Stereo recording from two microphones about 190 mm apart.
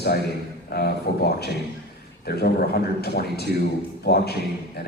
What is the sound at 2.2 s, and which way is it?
A man's voice, 55° left (ahead or behind).